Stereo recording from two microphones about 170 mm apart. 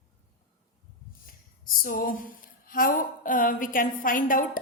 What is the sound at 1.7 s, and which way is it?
A woman's voice, 55° left (ahead or behind).